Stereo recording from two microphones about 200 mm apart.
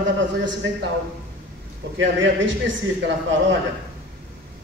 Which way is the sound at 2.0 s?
65° right (ahead or behind).